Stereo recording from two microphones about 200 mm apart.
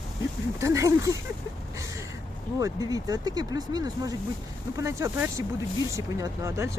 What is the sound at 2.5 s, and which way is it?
Speech, 15° right (ahead or behind).